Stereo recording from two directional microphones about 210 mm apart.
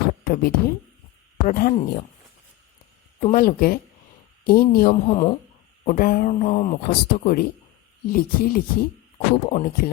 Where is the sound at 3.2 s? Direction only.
40° left (ahead or behind).